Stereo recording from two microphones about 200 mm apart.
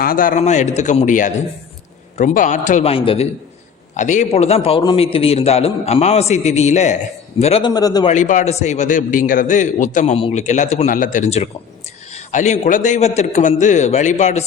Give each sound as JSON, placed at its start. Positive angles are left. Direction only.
{"t": 0.0, "sound": "a man's voice", "side_deg": 45}
{"t": 3.9, "sound": "a man's voice", "side_deg": 35}
{"t": 7.7, "sound": "a man's voice", "side_deg": 20}
{"t": 8.0, "sound": "a man's voice", "side_deg": 40}